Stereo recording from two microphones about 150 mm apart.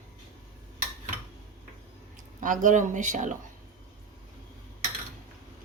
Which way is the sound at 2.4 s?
55° right (ahead or behind).